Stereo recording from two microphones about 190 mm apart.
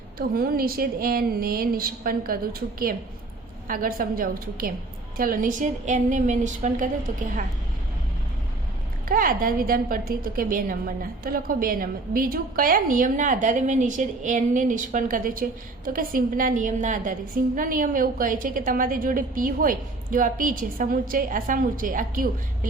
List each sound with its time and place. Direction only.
0.2 s a woman's voice: 50° right (ahead or behind)
9.0 s a woman's voice: 50° right (ahead or behind)